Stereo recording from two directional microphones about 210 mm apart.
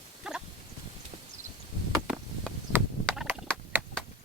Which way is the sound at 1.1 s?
45° right (ahead or behind).